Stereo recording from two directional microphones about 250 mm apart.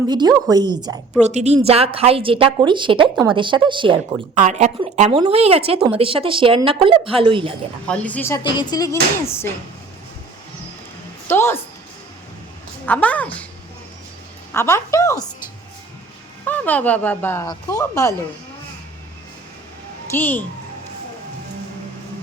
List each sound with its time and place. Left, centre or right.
0.1 s a woman's voice: centre
1.2 s a woman's voice: right
7.9 s speech: centre
11.3 s speech: centre
12.8 s a woman's voice: centre
14.5 s speech: centre
16.4 s speech: centre
20.1 s speech: centre